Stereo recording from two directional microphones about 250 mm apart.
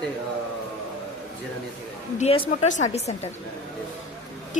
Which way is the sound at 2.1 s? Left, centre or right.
Left.